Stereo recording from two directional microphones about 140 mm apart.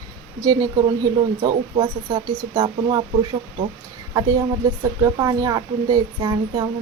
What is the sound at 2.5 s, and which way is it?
Speech, 30° right (ahead or behind).